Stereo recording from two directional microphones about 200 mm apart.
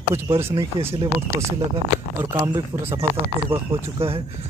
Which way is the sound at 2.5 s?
10° right (ahead or behind).